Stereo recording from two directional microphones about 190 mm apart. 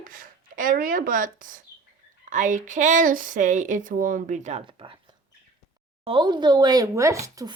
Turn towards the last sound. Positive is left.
turn(degrees=-15)  # may be behind; listen again after turning